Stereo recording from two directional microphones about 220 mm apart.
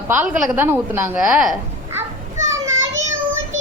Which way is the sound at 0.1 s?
10° right (ahead or behind).